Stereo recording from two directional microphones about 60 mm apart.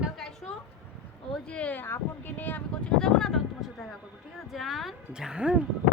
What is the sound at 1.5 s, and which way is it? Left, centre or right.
Speech, left.